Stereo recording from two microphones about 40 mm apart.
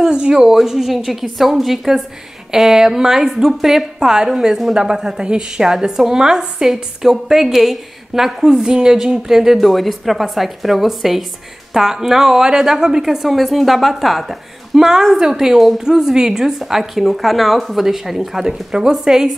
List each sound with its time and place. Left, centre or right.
0.0 s speech: centre
0.6 s a woman's voice: centre
8.5 s a woman's voice: centre
14.9 s speech: centre